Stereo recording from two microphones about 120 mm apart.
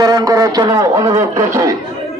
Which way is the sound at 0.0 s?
30° right (ahead or behind).